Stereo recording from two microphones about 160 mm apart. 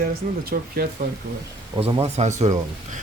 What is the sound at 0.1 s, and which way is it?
Speech, 65° right (ahead or behind).